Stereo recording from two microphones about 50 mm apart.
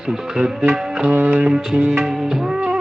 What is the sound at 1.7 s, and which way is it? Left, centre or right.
Music, right.